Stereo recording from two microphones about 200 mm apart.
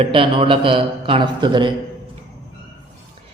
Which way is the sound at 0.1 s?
25° right (ahead or behind).